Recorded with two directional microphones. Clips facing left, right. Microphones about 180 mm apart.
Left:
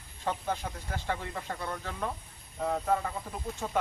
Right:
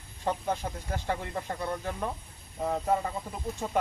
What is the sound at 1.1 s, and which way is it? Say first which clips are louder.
Speech: right 2 dB; 20° right (ahead or behind).